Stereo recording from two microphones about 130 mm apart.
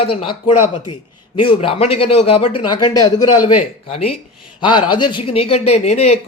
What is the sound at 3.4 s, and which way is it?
Speech, 45° left (ahead or behind).